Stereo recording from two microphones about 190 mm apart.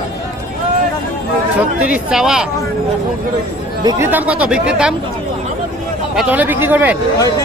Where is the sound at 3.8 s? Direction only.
20° right (ahead or behind).